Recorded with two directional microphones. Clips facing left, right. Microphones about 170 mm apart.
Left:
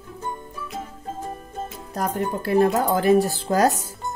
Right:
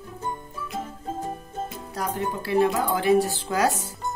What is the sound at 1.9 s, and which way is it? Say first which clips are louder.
Speech: left 3 dB; 50° left (ahead or behind).